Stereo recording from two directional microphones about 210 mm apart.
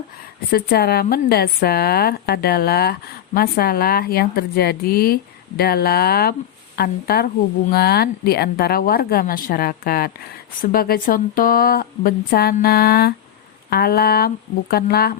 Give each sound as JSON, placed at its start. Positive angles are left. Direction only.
{"t": 0.5, "sound": "a woman's voice", "side_deg": 45}